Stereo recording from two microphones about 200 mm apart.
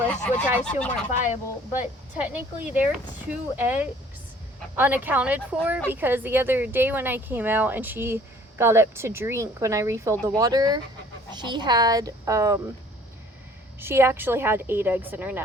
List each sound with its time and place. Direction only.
0.1 s speech: 5° left (ahead or behind)
1.8 s speech: 5° right (ahead or behind)
13.7 s speech: 10° right (ahead or behind)